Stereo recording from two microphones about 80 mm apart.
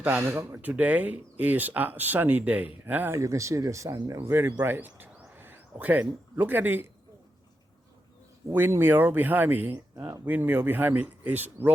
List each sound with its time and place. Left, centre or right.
0.0 s speech: right
3.2 s speech: right
4.2 s speech: right
8.5 s speech: right